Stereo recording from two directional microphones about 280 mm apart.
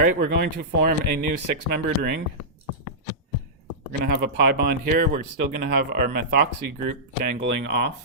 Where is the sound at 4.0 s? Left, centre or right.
Right.